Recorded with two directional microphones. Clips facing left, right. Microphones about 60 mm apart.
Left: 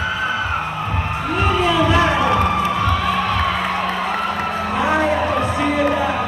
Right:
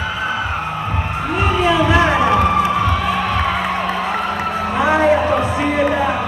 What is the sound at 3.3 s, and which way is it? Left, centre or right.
Music, centre.